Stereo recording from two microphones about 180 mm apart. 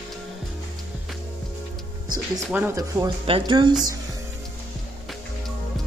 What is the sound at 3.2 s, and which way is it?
Speech, 30° right (ahead or behind).